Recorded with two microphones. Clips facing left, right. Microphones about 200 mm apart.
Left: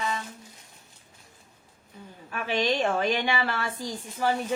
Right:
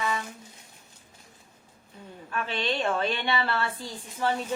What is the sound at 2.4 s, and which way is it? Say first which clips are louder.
A woman's voice: left 4 dB; 10° left (ahead or behind).